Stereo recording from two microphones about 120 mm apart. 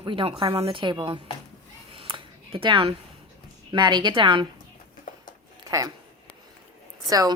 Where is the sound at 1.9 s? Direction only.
45° right (ahead or behind).